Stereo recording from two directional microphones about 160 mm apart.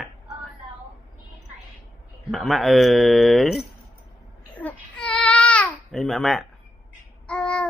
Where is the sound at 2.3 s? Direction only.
Centre (ahead or behind).